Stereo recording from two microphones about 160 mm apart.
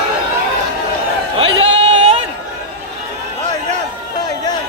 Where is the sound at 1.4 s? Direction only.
35° right (ahead or behind).